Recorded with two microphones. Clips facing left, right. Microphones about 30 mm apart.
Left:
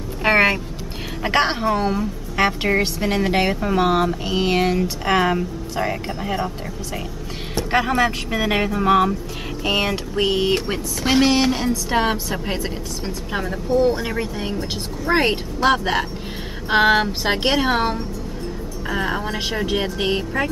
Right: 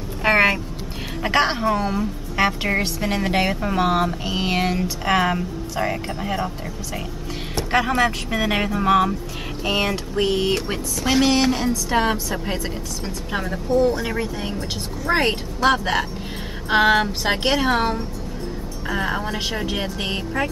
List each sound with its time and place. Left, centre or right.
0.2 s vehicle: centre
1.2 s a woman's voice: centre
13.7 s a woman's voice: centre
14.0 s a woman's voice: centre